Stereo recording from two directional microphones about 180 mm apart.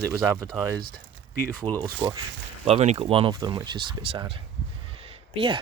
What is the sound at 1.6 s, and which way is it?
Speech, 25° right (ahead or behind).